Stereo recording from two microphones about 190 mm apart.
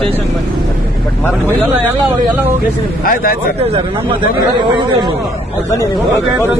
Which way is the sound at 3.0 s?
50° left (ahead or behind).